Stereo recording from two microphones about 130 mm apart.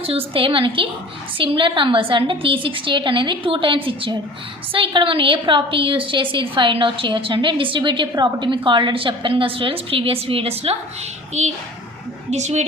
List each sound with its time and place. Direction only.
0.0 s a woman's voice: 45° right (ahead or behind)
11.4 s speech: 60° right (ahead or behind)